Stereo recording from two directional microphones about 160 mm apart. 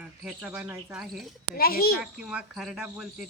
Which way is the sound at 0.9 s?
Centre (ahead or behind).